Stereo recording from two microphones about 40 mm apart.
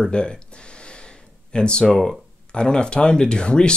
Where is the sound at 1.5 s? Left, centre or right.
Left.